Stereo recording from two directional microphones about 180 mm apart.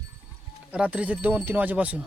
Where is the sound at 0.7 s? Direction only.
5° right (ahead or behind).